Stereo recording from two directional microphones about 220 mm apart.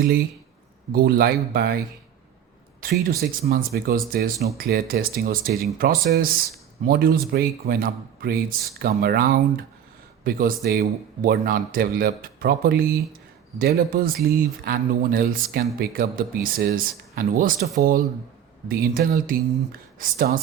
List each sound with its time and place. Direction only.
0.9 s speech: 45° right (ahead or behind)
2.8 s speech: 45° right (ahead or behind)